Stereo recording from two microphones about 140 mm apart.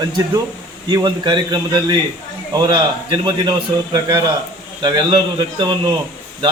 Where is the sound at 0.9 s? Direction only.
30° right (ahead or behind).